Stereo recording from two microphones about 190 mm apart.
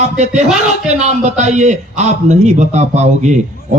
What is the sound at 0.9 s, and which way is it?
Speech, 40° right (ahead or behind).